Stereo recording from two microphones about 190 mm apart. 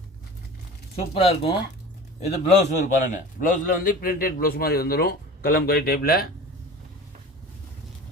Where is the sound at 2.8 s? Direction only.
45° left (ahead or behind).